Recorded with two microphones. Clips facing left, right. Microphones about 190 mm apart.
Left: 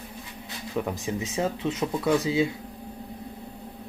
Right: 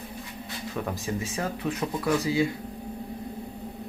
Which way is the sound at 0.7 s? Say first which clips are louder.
Left 3 dB; 20° left (ahead or behind).